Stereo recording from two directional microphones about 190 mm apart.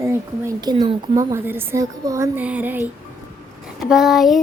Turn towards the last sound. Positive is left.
turn(degrees=0)  # may be behind; listen again after turning